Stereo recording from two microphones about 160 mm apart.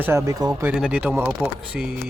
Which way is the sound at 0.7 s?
5° right (ahead or behind).